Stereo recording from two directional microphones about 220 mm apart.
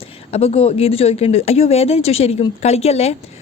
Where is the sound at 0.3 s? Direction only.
25° left (ahead or behind).